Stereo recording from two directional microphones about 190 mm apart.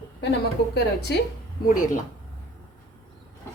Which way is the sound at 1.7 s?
45° left (ahead or behind).